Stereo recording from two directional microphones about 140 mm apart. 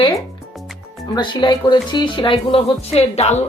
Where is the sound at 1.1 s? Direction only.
30° left (ahead or behind).